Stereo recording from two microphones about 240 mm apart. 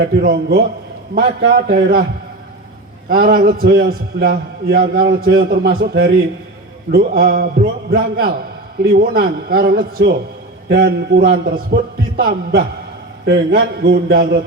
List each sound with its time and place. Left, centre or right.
0.0 s a man's voice: right
3.1 s a man's voice: right